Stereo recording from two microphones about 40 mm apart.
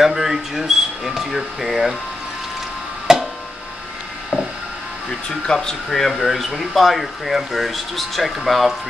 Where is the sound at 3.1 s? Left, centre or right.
Centre.